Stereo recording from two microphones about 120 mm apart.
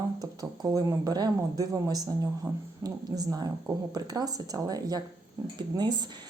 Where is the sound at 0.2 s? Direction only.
30° right (ahead or behind).